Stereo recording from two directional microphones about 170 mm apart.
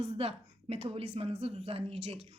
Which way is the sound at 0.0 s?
35° right (ahead or behind).